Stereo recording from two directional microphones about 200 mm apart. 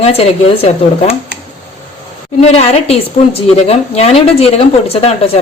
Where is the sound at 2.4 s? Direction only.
30° left (ahead or behind).